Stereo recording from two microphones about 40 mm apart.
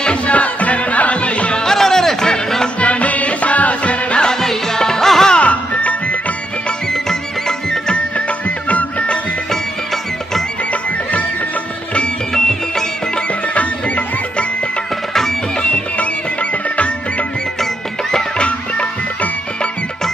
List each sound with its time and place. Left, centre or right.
0.0 s music: left
1.5 s music: centre
2.8 s music: left
4.2 s music: centre
5.4 s music: left
6.9 s music: centre
7.9 s music: left
9.5 s music: centre
10.7 s music: left
12.3 s music: centre
13.5 s music: left
15.1 s music: centre
15.7 s music: left
18.3 s music: left